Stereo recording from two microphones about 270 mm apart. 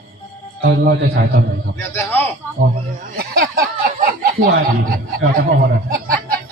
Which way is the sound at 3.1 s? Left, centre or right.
Right.